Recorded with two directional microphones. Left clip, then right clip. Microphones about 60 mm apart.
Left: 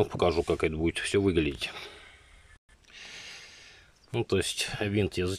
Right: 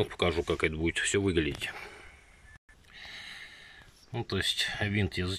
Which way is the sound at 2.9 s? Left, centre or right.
Centre.